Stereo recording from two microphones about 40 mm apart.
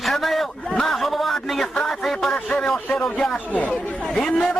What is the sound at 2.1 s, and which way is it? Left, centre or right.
Speech, centre.